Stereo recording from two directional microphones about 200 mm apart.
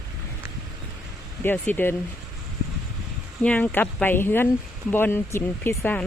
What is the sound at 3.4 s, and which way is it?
Speech, 10° left (ahead or behind).